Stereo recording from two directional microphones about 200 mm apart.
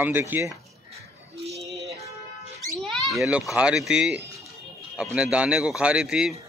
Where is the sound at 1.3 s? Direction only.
30° right (ahead or behind).